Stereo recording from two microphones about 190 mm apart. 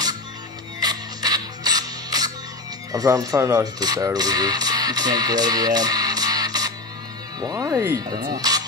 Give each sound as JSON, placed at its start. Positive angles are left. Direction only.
{"t": 0.7, "sound": "music", "side_deg": -20}
{"t": 2.9, "sound": "speech", "side_deg": -20}